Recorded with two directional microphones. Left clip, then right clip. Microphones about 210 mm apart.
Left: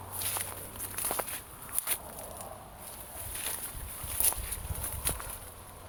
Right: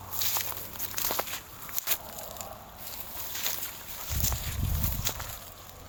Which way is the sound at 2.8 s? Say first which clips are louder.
Right 4 dB; 55° right (ahead or behind).